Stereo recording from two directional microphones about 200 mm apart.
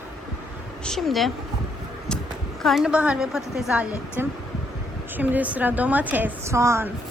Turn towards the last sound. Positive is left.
turn(degrees=-15)  # may be behind; listen again after turning